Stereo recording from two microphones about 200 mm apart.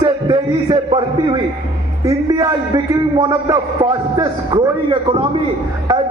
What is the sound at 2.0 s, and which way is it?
A man's voice, 15° right (ahead or behind).